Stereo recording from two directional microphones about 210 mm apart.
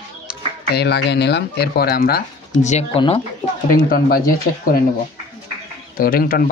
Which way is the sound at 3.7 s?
45° left (ahead or behind).